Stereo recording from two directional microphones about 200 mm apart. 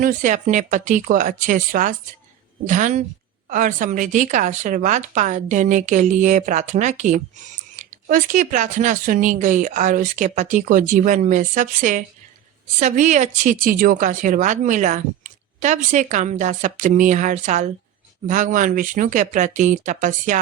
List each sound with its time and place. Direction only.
0.0 s a woman's voice: 40° right (ahead or behind)